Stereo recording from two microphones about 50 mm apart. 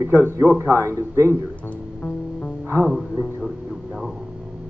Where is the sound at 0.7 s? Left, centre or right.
Right.